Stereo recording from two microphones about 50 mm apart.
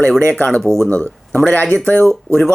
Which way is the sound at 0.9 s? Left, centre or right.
Left.